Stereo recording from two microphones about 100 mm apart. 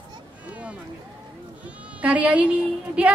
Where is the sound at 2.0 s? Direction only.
15° right (ahead or behind).